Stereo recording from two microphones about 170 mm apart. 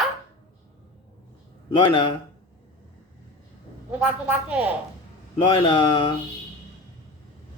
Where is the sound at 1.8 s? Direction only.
30° left (ahead or behind).